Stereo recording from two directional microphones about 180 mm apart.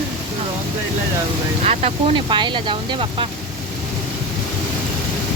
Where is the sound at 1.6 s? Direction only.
35° right (ahead or behind).